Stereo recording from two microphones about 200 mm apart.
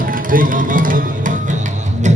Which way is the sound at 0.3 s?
45° right (ahead or behind).